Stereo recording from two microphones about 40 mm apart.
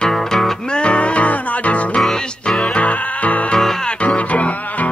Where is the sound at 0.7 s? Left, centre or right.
Left.